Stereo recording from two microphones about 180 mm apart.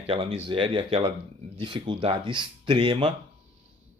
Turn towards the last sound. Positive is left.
turn(degrees=-30)  # may be behind; listen again after turning